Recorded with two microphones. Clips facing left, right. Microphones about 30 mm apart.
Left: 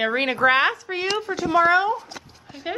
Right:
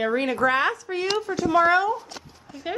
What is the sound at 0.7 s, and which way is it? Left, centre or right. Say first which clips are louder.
Speech: even; left.